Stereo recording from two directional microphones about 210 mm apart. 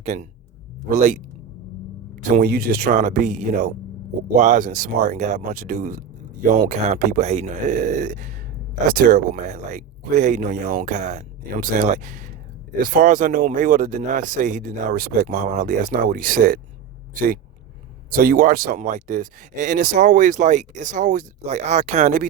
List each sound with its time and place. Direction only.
0.0 s speech: 35° right (ahead or behind)
2.4 s speech: 45° right (ahead or behind)
18.1 s speech: 45° right (ahead or behind)